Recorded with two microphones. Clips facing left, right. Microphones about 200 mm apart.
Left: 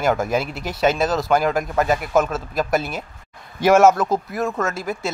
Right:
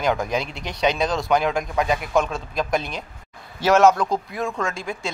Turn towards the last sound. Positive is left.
turn(degrees=5)  # may be behind; listen again after turning